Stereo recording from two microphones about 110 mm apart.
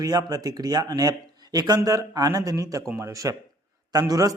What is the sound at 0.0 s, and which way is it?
Speech, 35° right (ahead or behind).